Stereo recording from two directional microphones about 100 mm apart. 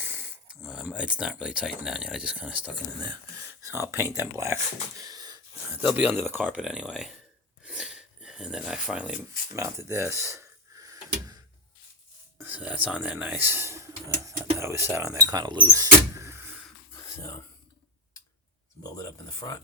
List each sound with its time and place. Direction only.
0.0 s speech: 20° right (ahead or behind)
3.4 s speech: 25° right (ahead or behind)
5.0 s wheeze: 40° right (ahead or behind)
5.8 s speech: 15° right (ahead or behind)
7.6 s a sound: 10° right (ahead or behind)
9.5 s a sound: 30° right (ahead or behind)
12.4 s speech: 15° right (ahead or behind)
15.3 s speech: 45° right (ahead or behind)
15.7 s power windows: 30° right (ahead or behind)
16.9 s a sound: 30° left (ahead or behind)
18.8 s speech: 35° left (ahead or behind)